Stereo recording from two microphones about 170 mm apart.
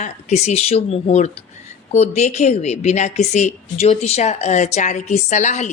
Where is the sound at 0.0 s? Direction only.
40° left (ahead or behind).